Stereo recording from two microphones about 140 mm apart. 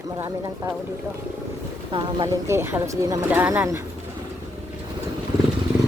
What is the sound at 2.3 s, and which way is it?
Speech, 20° right (ahead or behind).